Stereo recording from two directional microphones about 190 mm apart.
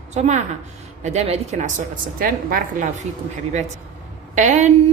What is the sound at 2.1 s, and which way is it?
Speech, 50° right (ahead or behind).